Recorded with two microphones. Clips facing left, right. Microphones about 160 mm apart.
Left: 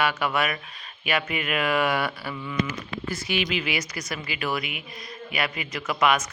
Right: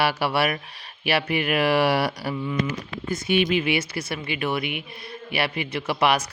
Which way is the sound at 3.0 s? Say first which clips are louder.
Right 7 dB; 20° right (ahead or behind).